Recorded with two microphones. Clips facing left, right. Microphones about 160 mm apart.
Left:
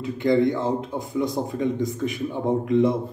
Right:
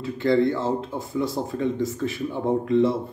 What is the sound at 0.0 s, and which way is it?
A man's voice, 15° left (ahead or behind).